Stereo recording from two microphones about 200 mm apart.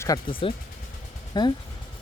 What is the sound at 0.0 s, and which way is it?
Speech, 20° left (ahead or behind).